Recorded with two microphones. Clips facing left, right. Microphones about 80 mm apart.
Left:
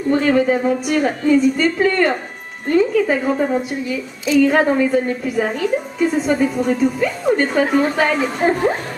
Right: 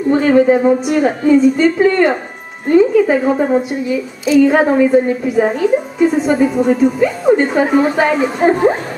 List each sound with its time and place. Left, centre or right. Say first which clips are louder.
0.1 s a woman's voice: right 5 dB; centre
3.9 s a woman's voice: right 5 dB; centre